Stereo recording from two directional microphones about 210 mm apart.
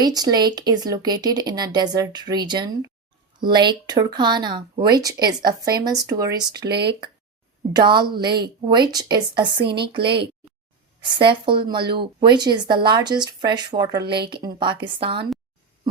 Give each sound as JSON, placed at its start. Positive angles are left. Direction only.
{"t": 0.0, "sound": "speech", "side_deg": -20}
{"t": 6.7, "sound": "speech", "side_deg": -50}
{"t": 7.7, "sound": "speech", "side_deg": -20}